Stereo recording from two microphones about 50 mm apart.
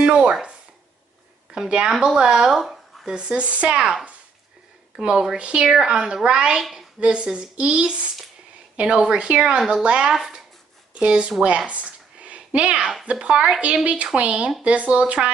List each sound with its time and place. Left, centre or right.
0.0 s a woman's voice: centre
2.6 s a sound: centre
3.1 s speech: centre
4.9 s a woman's voice: centre
6.6 s a woman's voice: centre
7.0 s speech: right
11.4 s a sound: right
13.0 s speech: right